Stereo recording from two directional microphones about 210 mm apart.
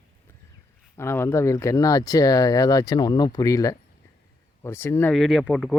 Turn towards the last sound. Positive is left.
turn(degrees=0)  # may be behind; listen again after turning